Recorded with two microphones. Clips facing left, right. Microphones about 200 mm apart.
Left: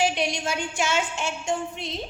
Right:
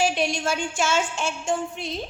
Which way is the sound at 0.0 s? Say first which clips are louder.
Right 1 dB; 20° left (ahead or behind).